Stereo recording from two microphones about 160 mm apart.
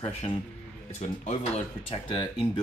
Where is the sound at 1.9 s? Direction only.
30° left (ahead or behind).